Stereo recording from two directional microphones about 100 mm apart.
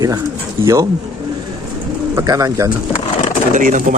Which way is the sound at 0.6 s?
30° right (ahead or behind).